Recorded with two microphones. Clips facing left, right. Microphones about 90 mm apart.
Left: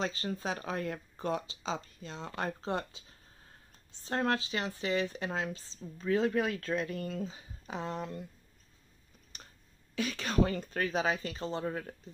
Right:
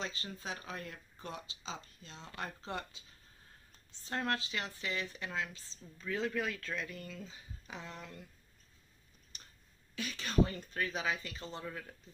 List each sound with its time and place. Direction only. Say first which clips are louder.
0.0 s speech: left 8 dB; 55° left (ahead or behind)
1.2 s speech: left 10 dB; 85° left
2.6 s speech: left 7 dB; 30° left (ahead or behind)
4.1 s speech: left 5 dB; 35° left (ahead or behind)
8.0 s speech: left 10 dB; 30° left (ahead or behind)
10.2 s speech: left 2 dB; 75° left (ahead or behind)
10.6 s speech: left 4 dB; 50° left (ahead or behind)
10.9 s speech: left 6 dB; 35° left (ahead or behind)
11.6 s speech: left 8 dB; 40° left (ahead or behind)